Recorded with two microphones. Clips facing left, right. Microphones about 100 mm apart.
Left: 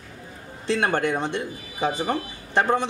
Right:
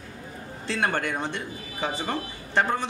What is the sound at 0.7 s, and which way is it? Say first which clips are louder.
Speech: left 4 dB; 15° left (ahead or behind).